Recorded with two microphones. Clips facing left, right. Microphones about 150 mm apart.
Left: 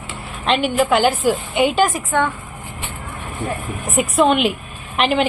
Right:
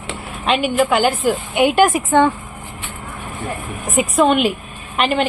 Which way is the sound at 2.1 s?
20° right (ahead or behind).